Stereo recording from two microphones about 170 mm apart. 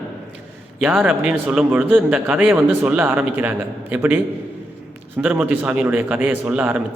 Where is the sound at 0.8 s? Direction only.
10° right (ahead or behind).